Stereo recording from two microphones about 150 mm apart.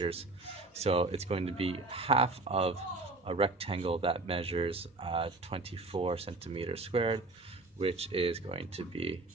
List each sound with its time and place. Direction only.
0.7 s speech: 40° right (ahead or behind)